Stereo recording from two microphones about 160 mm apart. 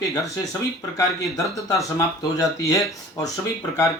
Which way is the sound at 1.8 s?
20° left (ahead or behind).